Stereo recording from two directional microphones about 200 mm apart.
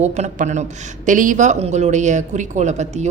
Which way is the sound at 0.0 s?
35° right (ahead or behind).